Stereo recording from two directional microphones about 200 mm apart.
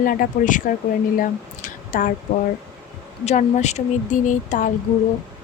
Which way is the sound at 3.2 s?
35° left (ahead or behind).